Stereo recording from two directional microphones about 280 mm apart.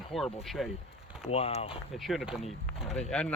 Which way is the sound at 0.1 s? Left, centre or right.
Centre.